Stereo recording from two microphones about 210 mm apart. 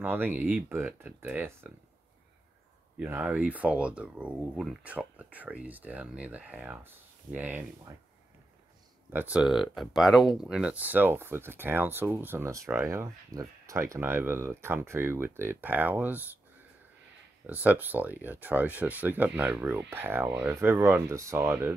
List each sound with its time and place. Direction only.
0.0 s speech: 10° right (ahead or behind)
3.0 s speech: 10° right (ahead or behind)
9.1 s speech: 10° right (ahead or behind)
17.5 s speech: 10° right (ahead or behind)